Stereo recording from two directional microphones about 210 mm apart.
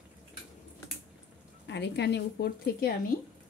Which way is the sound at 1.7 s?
55° left (ahead or behind).